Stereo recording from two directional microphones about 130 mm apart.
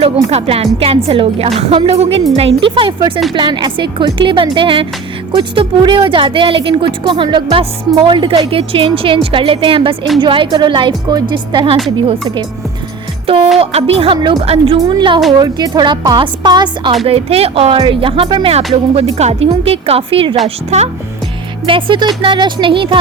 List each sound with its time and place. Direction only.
0.3 s a woman's voice: 50° right (ahead or behind)
13.2 s speech: 45° right (ahead or behind)
14.8 s a woman's voice: 35° right (ahead or behind)
17.1 s speech: 50° right (ahead or behind)
20.7 s speech: 55° right (ahead or behind)
21.7 s a woman's voice: 40° right (ahead or behind)